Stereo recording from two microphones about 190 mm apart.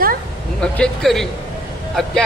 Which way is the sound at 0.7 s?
5° left (ahead or behind).